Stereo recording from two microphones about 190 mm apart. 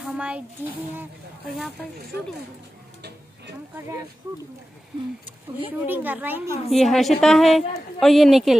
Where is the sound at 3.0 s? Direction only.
60° right (ahead or behind).